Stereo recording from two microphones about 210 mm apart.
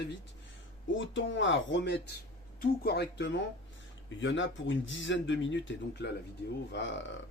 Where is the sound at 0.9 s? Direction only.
65° left (ahead or behind).